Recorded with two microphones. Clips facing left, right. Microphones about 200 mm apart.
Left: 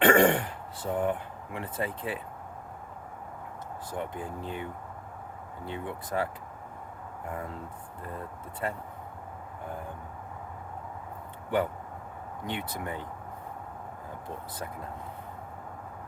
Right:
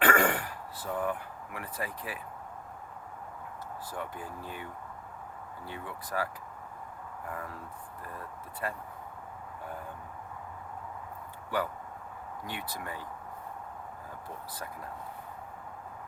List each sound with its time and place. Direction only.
0.0 s throat clearing: 25° left (ahead or behind)
3.9 s speech: 25° left (ahead or behind)
7.3 s speech: 25° left (ahead or behind)
8.6 s speech: 25° left (ahead or behind)
12.5 s speech: 25° left (ahead or behind)